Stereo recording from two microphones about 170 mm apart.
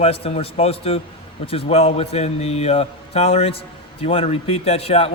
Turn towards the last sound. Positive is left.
turn(degrees=35)  # may be behind; listen again after turning